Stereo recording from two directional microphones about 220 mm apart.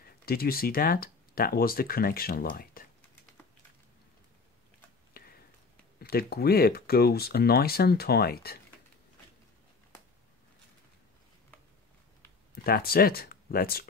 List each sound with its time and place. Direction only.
0.2 s speech: 45° left (ahead or behind)
5.2 s a sound: 40° left (ahead or behind)
5.9 s speech: 45° left (ahead or behind)
12.6 s speech: 45° left (ahead or behind)